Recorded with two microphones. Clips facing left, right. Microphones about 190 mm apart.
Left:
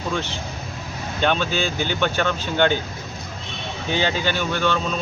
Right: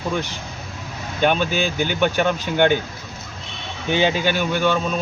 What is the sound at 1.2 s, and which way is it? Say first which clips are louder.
Speech: right 2 dB; 10° right (ahead or behind).